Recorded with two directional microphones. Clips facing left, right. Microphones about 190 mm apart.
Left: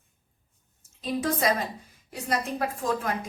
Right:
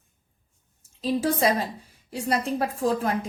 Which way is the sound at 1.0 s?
30° right (ahead or behind).